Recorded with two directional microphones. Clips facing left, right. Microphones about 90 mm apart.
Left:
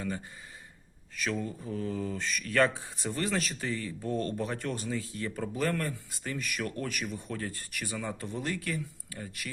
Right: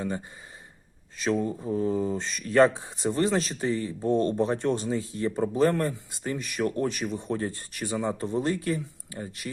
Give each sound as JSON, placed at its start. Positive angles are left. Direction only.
{"t": 1.1, "sound": "speech", "side_deg": -25}